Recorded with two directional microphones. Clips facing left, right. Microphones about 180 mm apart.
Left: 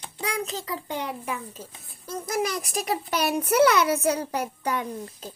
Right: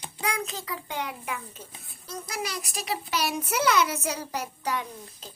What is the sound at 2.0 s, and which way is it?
A child's voice, 50° left (ahead or behind).